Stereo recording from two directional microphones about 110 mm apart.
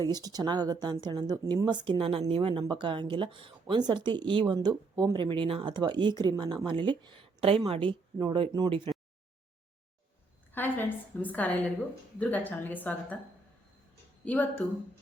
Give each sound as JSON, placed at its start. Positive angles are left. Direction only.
{"t": 0.1, "sound": "speech", "side_deg": -35}
{"t": 10.5, "sound": "a woman's voice", "side_deg": 20}
{"t": 14.2, "sound": "a woman's voice", "side_deg": 10}